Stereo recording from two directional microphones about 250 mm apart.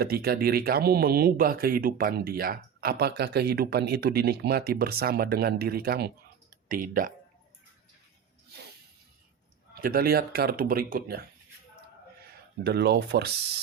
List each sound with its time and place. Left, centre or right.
0.0 s speech: right
6.5 s a sound: right
9.8 s speech: right